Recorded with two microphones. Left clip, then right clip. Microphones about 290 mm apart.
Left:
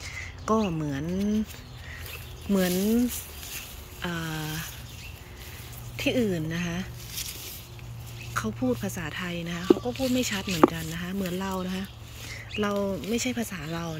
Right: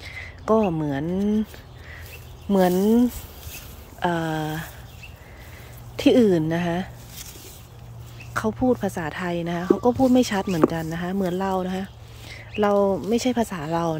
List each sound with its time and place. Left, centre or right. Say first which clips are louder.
0.0 s a sound: right 3 dB; centre
2.5 s speech: right 7 dB; centre
5.9 s speech: right 9 dB; centre
8.3 s speech: right 7 dB; centre